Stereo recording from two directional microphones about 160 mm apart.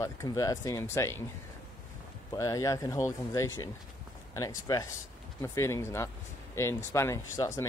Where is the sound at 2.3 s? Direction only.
20° left (ahead or behind).